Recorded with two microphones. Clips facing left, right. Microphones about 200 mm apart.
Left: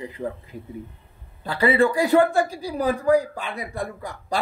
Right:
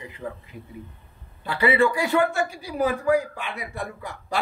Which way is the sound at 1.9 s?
35° left (ahead or behind).